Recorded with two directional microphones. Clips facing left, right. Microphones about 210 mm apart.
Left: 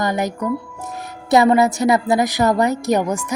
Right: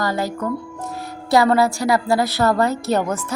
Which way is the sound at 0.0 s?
20° left (ahead or behind).